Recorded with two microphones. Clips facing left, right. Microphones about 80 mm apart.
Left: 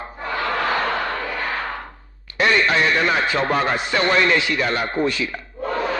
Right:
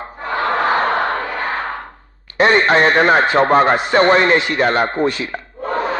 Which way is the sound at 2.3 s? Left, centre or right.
Right.